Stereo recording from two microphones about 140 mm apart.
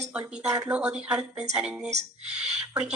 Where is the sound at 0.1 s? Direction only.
10° right (ahead or behind).